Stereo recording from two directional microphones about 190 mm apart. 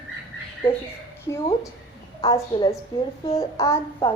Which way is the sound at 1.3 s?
15° left (ahead or behind).